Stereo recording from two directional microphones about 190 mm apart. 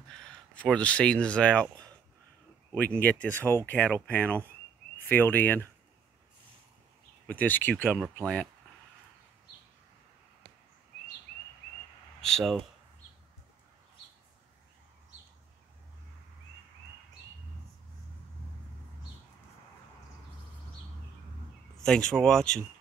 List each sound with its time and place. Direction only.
0.2 s speech: 5° left (ahead or behind)
3.0 s speech: 5° left (ahead or behind)
7.2 s speech: 10° left (ahead or behind)
7.9 s speech: 5° right (ahead or behind)
12.2 s speech: centre (ahead or behind)
21.7 s speech: 5° left (ahead or behind)